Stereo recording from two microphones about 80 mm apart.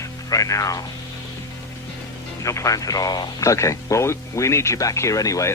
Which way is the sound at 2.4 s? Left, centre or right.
Left.